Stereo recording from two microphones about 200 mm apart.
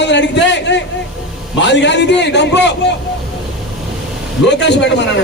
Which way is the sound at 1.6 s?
60° left (ahead or behind).